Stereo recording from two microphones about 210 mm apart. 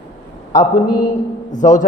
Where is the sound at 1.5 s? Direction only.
35° left (ahead or behind).